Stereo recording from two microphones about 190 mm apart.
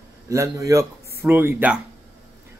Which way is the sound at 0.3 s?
15° right (ahead or behind).